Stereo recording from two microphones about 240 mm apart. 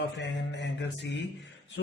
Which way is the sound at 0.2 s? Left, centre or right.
Left.